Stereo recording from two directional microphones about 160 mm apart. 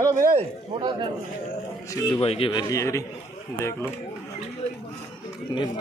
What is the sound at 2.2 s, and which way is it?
Speech, 35° left (ahead or behind).